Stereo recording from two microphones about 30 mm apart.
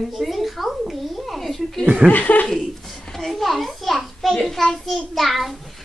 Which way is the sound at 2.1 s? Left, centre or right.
Left.